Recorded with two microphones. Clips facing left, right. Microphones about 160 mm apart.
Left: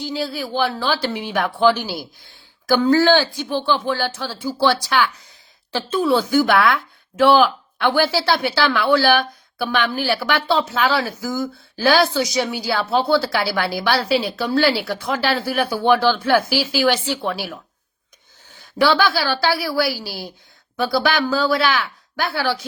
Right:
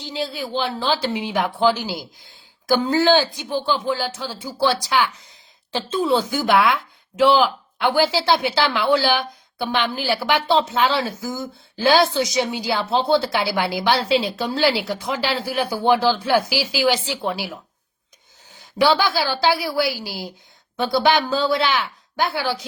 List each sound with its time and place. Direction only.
0.0 s speech: 25° right (ahead or behind)